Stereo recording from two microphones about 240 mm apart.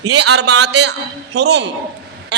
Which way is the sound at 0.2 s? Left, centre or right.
Right.